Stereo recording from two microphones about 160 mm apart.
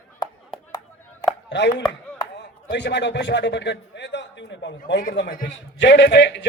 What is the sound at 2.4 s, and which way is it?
A man's voice, 90° left.